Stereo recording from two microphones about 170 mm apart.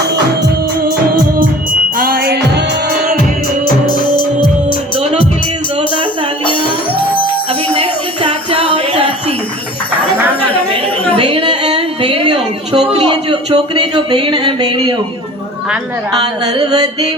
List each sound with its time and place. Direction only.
2.0 s music: 60° right (ahead or behind)
3.8 s music: 25° left (ahead or behind)
7.7 s music: 35° right (ahead or behind)
10.8 s a sound: 10° left (ahead or behind)
11.2 s a sound: 35° right (ahead or behind)
16.6 s music: 25° right (ahead or behind)